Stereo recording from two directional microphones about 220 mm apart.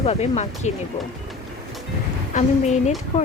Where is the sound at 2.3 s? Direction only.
30° left (ahead or behind).